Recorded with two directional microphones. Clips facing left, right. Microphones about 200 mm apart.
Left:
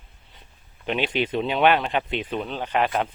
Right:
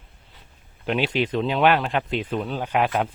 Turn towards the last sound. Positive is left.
turn(degrees=-5)  # may be behind; listen again after turning